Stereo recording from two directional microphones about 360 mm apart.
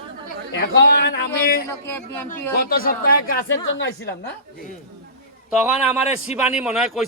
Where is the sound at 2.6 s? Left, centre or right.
Left.